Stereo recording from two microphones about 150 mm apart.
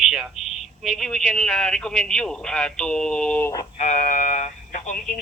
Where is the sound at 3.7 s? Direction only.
55° left (ahead or behind).